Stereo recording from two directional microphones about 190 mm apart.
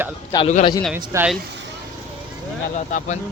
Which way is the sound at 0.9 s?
5° right (ahead or behind).